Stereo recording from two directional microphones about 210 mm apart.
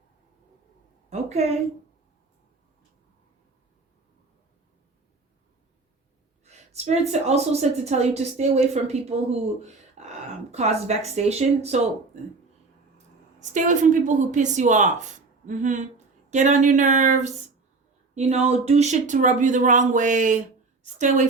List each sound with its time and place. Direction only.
1.1 s a woman's voice: 30° right (ahead or behind)
6.4 s a woman's voice: 30° right (ahead or behind)
10.0 s a sound: 30° right (ahead or behind)
10.5 s a woman's voice: 30° right (ahead or behind)
13.4 s a woman's voice: 35° right (ahead or behind)